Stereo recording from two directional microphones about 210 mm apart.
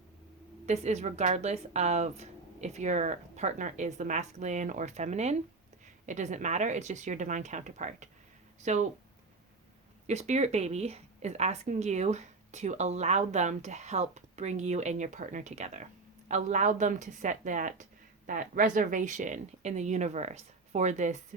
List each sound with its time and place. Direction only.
0.6 s a woman's voice: 30° right (ahead or behind)
10.1 s a woman's voice: 30° right (ahead or behind)